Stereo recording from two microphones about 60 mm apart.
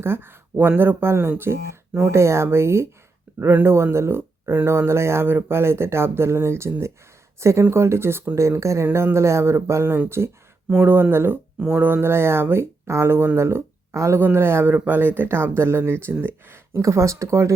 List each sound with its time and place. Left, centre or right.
0.0 s speech: right
3.3 s a sound: right
3.6 s speech: right
8.4 s speech: right
14.2 s speech: right
16.8 s speech: right